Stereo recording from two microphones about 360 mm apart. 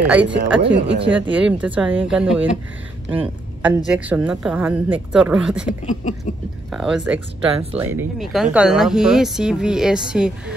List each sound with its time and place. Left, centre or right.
0.0 s speech: centre
0.6 s speech: right
1.0 s speech: centre
1.8 s speech: centre
5.9 s a sound: centre
6.7 s speech: centre